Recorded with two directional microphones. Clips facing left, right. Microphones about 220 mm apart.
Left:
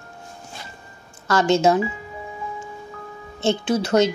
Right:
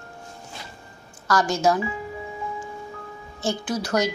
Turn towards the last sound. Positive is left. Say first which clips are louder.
# left 6 dB
turn(degrees=25)  # may be behind; listen again after turning